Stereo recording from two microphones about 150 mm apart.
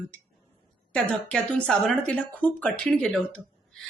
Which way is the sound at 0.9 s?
5° left (ahead or behind).